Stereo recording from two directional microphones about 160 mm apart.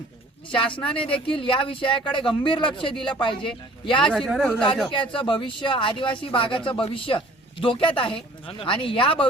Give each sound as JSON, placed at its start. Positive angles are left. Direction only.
{"t": 0.5, "sound": "speech", "side_deg": 30}
{"t": 4.0, "sound": "speech", "side_deg": 5}
{"t": 4.9, "sound": "speech", "side_deg": 30}